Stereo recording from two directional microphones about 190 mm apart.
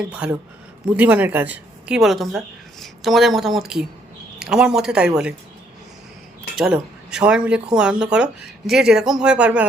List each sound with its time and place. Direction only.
0.0 s a woman's voice: 5° right (ahead or behind)
6.6 s speech: 5° right (ahead or behind)